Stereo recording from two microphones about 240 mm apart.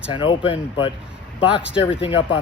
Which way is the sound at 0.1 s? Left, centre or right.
Left.